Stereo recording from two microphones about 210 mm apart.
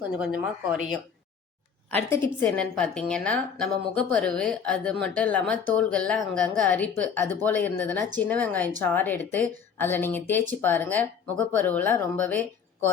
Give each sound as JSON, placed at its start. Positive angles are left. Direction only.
{"t": 0.3, "sound": "a woman's voice", "side_deg": -45}
{"t": 1.9, "sound": "a woman's voice", "side_deg": 10}